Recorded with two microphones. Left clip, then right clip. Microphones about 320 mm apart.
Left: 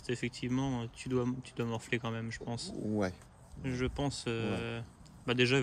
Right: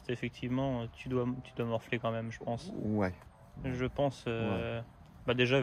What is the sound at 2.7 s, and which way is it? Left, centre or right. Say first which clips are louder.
Speech: left 1 dB; right.